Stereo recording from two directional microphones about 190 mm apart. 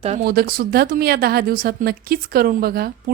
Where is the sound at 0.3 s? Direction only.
50° right (ahead or behind).